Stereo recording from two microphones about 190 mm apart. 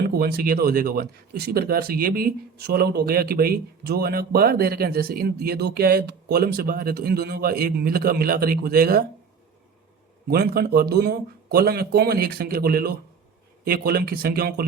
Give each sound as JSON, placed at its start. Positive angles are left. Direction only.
{"t": 0.1, "sound": "speech", "side_deg": -55}
{"t": 10.2, "sound": "speech", "side_deg": -55}